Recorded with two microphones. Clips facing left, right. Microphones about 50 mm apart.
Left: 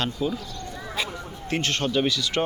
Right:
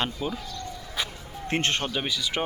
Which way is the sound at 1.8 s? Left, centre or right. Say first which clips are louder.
Left 5 dB; centre.